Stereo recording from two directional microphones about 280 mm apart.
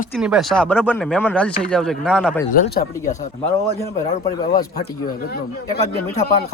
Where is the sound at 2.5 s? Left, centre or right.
Left.